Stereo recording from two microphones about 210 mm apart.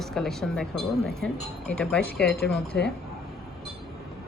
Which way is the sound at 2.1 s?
50° left (ahead or behind).